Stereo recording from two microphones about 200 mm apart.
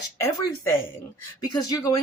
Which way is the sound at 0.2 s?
15° left (ahead or behind).